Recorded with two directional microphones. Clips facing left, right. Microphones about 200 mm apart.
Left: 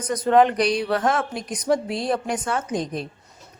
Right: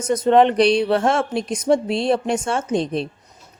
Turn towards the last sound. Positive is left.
turn(degrees=-25)  # may be behind; listen again after turning